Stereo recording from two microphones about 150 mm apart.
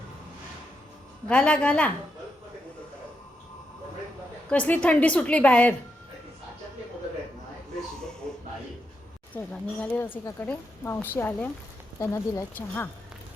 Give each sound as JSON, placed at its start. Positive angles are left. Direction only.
{"t": 1.3, "sound": "a woman's voice", "side_deg": 10}
{"t": 4.4, "sound": "a woman's voice", "side_deg": 10}
{"t": 9.3, "sound": "a woman's voice", "side_deg": 10}